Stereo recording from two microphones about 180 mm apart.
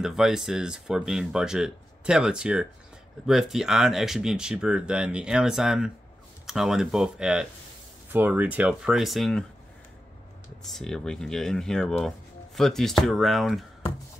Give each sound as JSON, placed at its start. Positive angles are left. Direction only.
{"t": 0.0, "sound": "speech", "side_deg": -5}
{"t": 10.6, "sound": "speech", "side_deg": 0}